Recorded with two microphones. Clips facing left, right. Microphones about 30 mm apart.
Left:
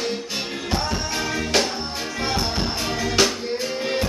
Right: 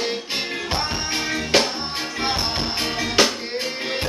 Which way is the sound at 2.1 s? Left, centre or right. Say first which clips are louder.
Even; right.